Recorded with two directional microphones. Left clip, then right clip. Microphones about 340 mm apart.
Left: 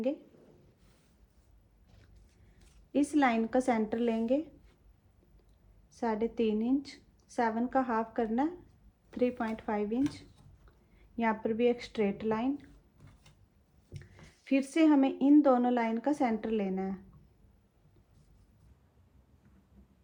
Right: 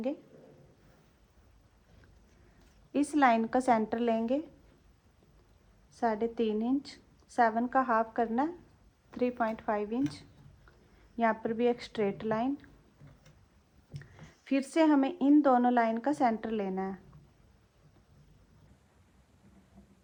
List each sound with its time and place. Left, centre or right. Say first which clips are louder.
2.9 s speech: right 2 dB; right
6.0 s speech: right 1 dB; right
11.2 s speech: right 1 dB; right
14.2 s speech: left 1 dB; right